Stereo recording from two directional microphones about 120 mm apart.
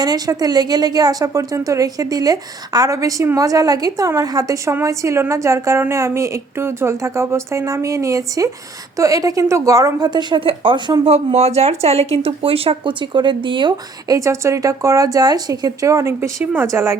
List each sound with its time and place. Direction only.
0.0 s a woman's voice: 35° right (ahead or behind)
11.1 s speech: 60° right (ahead or behind); by 14.2 s 40° right (ahead or behind)
14.2 s speech: 25° right (ahead or behind)
16.4 s a woman's voice: 15° right (ahead or behind)